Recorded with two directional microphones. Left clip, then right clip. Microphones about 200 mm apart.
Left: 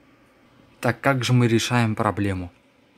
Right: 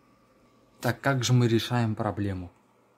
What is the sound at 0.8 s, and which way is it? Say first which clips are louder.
A man's voice: left 6 dB; 15° left (ahead or behind).